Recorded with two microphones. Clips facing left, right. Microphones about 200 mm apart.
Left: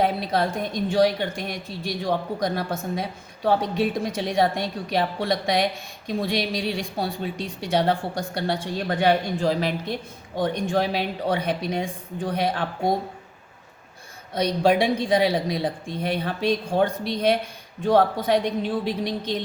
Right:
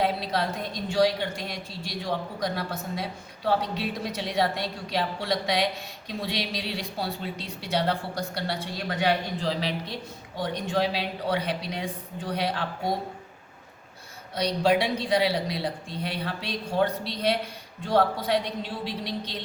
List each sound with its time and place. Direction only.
0.0 s a woman's voice: 50° left (ahead or behind)
14.3 s a woman's voice: 50° left (ahead or behind)